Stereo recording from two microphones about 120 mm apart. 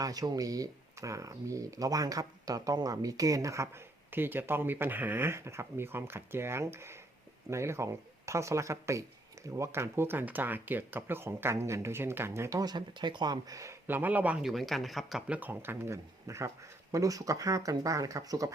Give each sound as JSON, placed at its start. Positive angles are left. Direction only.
{"t": 0.0, "sound": "speech", "side_deg": -30}
{"t": 15.3, "sound": "speech", "side_deg": -15}